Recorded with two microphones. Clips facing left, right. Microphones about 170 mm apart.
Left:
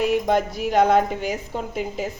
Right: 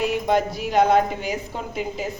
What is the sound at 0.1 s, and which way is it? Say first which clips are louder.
Speech: left 1 dB; 50° left (ahead or behind).